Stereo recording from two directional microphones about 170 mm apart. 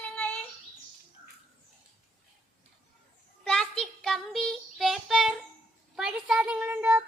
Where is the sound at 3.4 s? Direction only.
5° left (ahead or behind).